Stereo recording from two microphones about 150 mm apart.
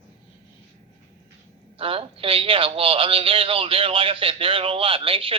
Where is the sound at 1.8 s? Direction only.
40° right (ahead or behind).